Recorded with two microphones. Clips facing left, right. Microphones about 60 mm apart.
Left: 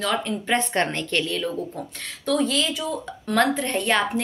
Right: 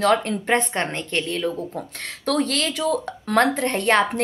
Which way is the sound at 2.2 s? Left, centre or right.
Right.